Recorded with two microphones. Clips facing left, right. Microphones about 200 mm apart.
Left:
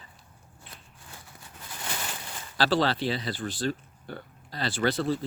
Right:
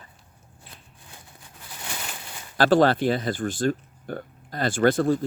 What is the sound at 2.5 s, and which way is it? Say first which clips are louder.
Speech: right 7 dB; 50° right (ahead or behind).